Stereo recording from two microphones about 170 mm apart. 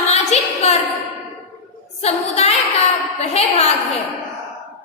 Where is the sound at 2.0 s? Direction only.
40° left (ahead or behind).